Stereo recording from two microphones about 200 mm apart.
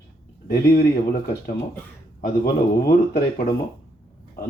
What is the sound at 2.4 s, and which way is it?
Speech, 50° left (ahead or behind).